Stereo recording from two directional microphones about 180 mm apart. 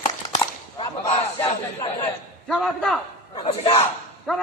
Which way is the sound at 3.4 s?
25° left (ahead or behind).